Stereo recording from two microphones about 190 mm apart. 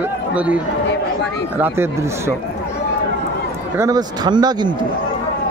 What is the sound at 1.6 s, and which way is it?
Speech, 10° right (ahead or behind).